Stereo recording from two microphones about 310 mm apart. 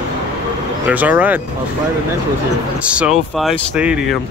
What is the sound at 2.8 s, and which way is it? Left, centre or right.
Speech, centre.